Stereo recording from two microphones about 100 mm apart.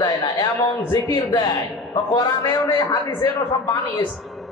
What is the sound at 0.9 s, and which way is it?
A man's voice, 40° left (ahead or behind).